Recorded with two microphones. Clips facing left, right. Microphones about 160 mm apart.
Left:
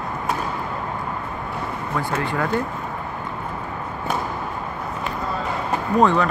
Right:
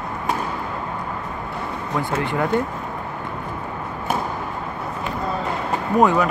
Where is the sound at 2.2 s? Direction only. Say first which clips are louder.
Right 1 dB; 20° right (ahead or behind).